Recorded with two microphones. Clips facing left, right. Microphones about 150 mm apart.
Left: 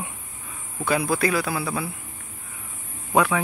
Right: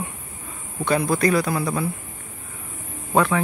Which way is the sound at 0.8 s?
5° left (ahead or behind).